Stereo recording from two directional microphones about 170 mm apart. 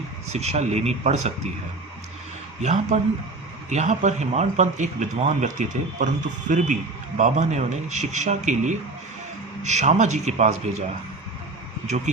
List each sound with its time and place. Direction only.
0.3 s speech: 40° right (ahead or behind)
2.6 s speech: 40° right (ahead or behind)